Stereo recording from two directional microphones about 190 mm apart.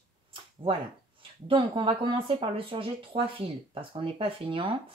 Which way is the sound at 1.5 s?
25° right (ahead or behind).